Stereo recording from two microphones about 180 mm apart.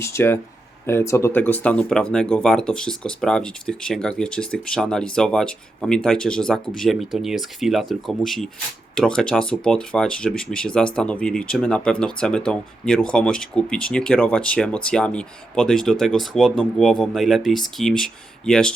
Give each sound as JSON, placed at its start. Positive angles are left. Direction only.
{"t": 0.0, "sound": "speech", "side_deg": 15}